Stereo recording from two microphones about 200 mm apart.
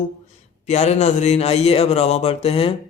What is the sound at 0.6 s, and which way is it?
Speech, 35° left (ahead or behind).